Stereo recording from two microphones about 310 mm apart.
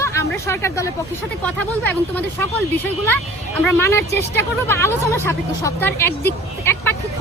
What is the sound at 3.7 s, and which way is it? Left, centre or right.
Speech, centre.